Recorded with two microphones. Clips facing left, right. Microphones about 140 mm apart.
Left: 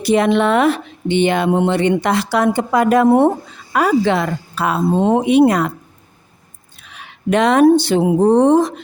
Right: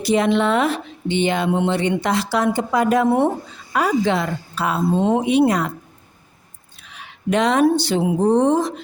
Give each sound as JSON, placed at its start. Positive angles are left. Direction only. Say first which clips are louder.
{"t": 0.0, "sound": "a woman's voice", "louder": "left 3 dB", "side_deg": 60}
{"t": 6.9, "sound": "a woman's voice", "louder": "left 3 dB", "side_deg": 60}